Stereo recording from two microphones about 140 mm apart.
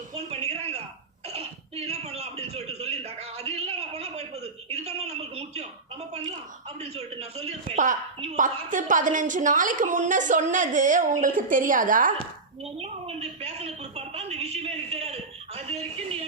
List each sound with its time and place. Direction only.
0.1 s music: 45° right (ahead or behind)
1.3 s a sound: 45° right (ahead or behind)
6.7 s a woman's voice: 50° right (ahead or behind)
8.4 s a woman's voice: 70° right (ahead or behind)
12.6 s a woman's voice: 45° right (ahead or behind)